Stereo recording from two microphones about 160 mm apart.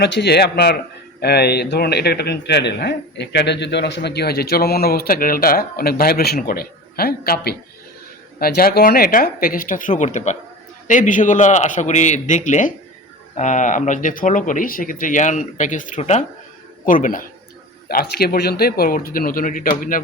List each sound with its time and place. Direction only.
0.0 s speech: 90° left; by 17.2 s 55° left (ahead or behind)
17.8 s speech: 75° left (ahead or behind); by 20.0 s 60° left (ahead or behind)